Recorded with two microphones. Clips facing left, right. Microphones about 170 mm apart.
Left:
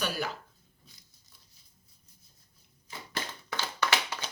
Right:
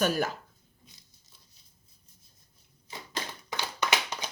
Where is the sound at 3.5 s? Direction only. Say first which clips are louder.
Even; 15° right (ahead or behind).